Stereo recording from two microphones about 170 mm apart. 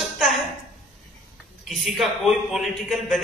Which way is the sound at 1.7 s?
Centre (ahead or behind).